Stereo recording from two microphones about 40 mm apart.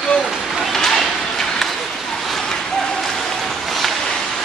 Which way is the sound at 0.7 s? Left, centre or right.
Centre.